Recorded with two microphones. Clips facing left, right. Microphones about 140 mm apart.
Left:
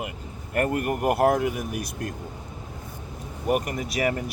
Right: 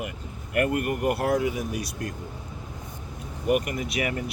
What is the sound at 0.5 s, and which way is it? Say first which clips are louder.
Speech: even; 45° left (ahead or behind).